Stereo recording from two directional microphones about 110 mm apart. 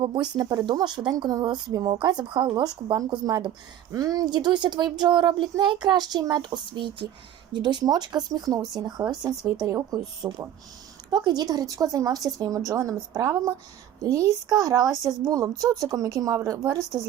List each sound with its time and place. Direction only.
0.0 s a child's voice: 45° right (ahead or behind); by 10.4 s 25° right (ahead or behind)
11.1 s a child's voice: 35° right (ahead or behind)